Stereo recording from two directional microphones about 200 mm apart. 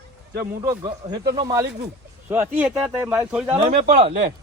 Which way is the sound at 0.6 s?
15° right (ahead or behind).